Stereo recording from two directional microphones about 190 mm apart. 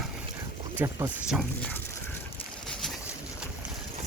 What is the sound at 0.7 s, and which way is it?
Speech, 15° right (ahead or behind).